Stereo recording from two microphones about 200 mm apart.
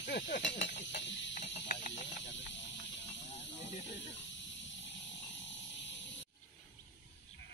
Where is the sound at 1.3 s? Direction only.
35° left (ahead or behind).